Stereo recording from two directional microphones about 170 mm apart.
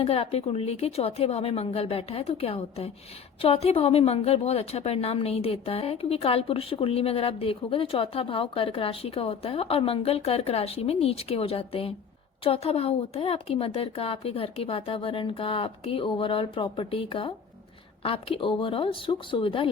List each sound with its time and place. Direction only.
0.0 s a woman's voice: 35° left (ahead or behind)